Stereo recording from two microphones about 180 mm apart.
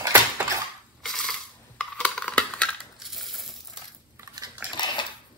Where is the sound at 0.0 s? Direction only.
10° right (ahead or behind).